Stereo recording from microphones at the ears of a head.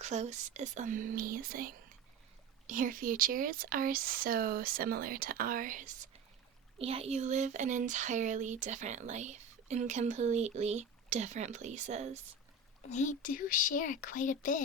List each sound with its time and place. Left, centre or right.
0.0 s speech: right
13.4 s speech: left